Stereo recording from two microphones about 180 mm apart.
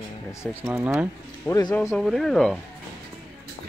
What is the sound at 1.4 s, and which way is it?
Speech, 15° left (ahead or behind).